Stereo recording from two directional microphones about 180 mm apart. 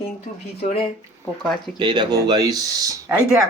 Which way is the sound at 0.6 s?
30° left (ahead or behind).